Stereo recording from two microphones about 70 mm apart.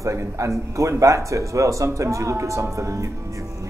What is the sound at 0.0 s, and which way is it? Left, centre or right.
Speech, right.